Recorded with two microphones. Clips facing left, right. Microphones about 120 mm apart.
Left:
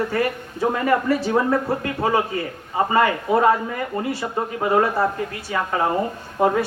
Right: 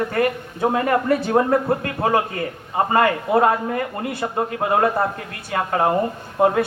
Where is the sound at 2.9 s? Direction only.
55° right (ahead or behind).